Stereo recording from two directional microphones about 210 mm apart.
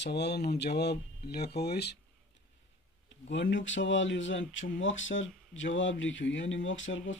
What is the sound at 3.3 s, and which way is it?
Speech, 60° left (ahead or behind).